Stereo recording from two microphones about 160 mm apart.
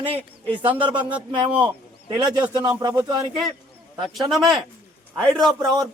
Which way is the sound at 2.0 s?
25° right (ahead or behind).